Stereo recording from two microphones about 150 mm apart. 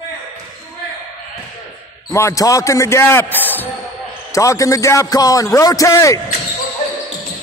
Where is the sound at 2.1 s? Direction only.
20° left (ahead or behind).